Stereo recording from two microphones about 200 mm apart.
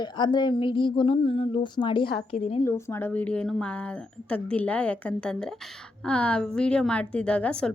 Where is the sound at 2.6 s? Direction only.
10° left (ahead or behind).